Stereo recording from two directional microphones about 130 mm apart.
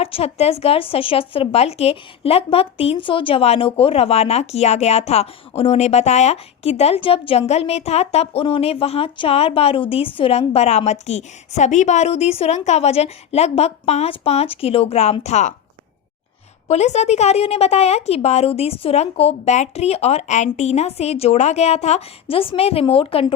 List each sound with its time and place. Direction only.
0.0 s a woman's voice: 50° left (ahead or behind)
15.2 s a woman's voice: 65° left (ahead or behind)
16.6 s a woman's voice: 60° left (ahead or behind)